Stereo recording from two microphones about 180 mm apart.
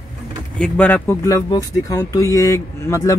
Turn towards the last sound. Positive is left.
turn(degrees=15)  # may be behind; listen again after turning